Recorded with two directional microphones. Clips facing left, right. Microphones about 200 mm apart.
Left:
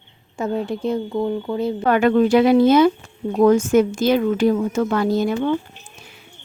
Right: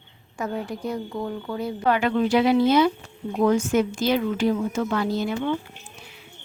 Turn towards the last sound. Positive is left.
turn(degrees=45)  # may be behind; listen again after turning